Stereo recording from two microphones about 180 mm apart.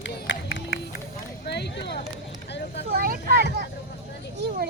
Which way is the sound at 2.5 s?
70° left (ahead or behind).